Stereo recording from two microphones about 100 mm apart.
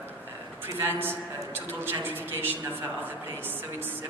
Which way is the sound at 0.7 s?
20° right (ahead or behind).